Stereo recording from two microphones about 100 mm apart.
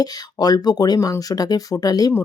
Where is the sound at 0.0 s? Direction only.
40° left (ahead or behind).